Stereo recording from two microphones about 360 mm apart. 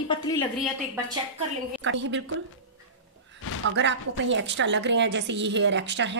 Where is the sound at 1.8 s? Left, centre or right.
Right.